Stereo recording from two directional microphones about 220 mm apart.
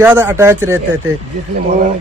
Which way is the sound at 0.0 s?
10° right (ahead or behind).